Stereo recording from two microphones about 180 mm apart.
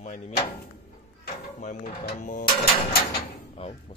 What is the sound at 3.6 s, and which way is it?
Speech, 35° left (ahead or behind).